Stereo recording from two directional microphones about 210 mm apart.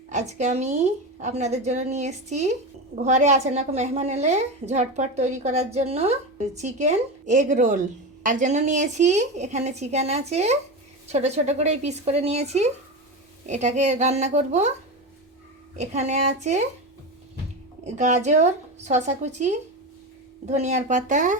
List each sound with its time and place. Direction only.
0.1 s a woman's voice: 35° right (ahead or behind)
15.7 s a woman's voice: 30° right (ahead or behind)
17.8 s a woman's voice: 35° right (ahead or behind)